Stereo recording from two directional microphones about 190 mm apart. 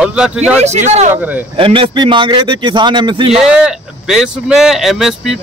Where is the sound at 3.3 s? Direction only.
5° right (ahead or behind).